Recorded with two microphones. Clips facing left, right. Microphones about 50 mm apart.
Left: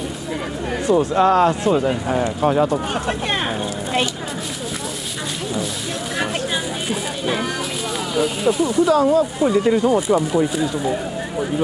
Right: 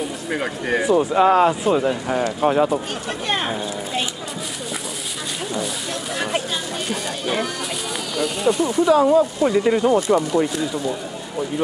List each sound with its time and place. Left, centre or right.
0.3 s speech: right
0.8 s speech: centre
3.3 s a sound: centre
8.1 s speech: centre
8.6 s speech: centre
9.9 s speech: centre